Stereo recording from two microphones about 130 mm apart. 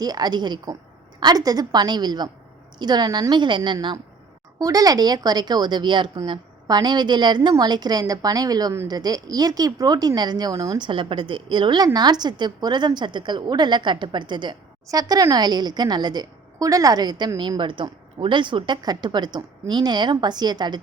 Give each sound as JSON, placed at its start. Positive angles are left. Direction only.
{"t": 0.0, "sound": "a woman's voice", "side_deg": -30}